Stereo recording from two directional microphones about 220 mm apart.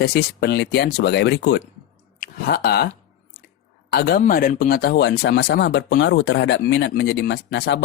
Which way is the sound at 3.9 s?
45° left (ahead or behind).